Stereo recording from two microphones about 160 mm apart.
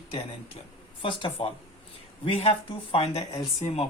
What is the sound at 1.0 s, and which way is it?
Speech, 30° left (ahead or behind).